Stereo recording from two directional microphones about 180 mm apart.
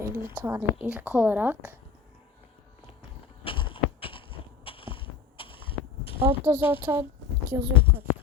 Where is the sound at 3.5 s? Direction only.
30° left (ahead or behind).